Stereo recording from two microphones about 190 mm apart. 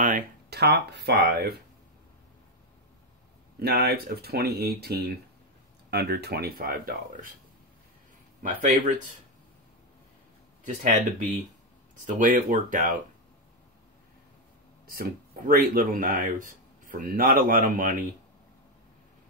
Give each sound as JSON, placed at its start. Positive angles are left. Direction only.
{"t": 0.0, "sound": "speech", "side_deg": -50}
{"t": 3.5, "sound": "speech", "side_deg": -55}
{"t": 8.4, "sound": "speech", "side_deg": -45}
{"t": 10.6, "sound": "speech", "side_deg": -40}
{"t": 14.9, "sound": "speech", "side_deg": -50}